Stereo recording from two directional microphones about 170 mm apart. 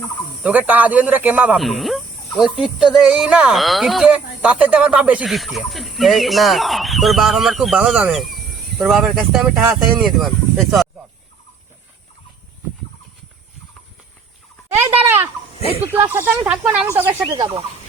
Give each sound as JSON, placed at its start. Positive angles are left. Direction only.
{"t": 0.4, "sound": "speech", "side_deg": -10}
{"t": 14.8, "sound": "speech", "side_deg": -15}
{"t": 17.2, "sound": "speech", "side_deg": -25}